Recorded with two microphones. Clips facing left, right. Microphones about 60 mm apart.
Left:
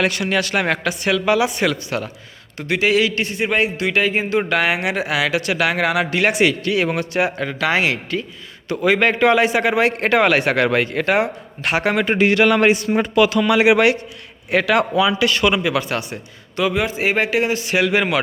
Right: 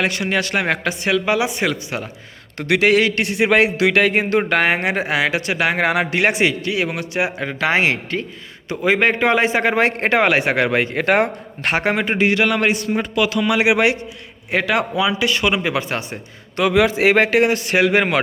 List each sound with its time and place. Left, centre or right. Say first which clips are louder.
0.0 s a man's voice: left 1 dB; right
2.6 s a man's voice: right 2 dB; right
3.2 s speech: right 4 dB; right
6.7 s a man's voice: left 3 dB; centre
7.2 s a man's voice: right 1 dB; centre
10.9 s speech: right 1 dB; right
12.0 s a man's voice: left 2 dB; centre
12.5 s a man's voice: left 3 dB; centre
13.5 s a man's voice: left 2 dB; centre; by 16.2 s right
16.7 s a man's voice: right 9 dB; right
17.3 s speech: right 3 dB; right